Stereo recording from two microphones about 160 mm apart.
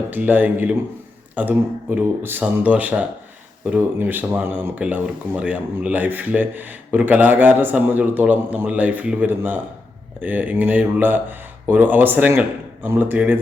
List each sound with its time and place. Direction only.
0.1 s speech: 10° right (ahead or behind)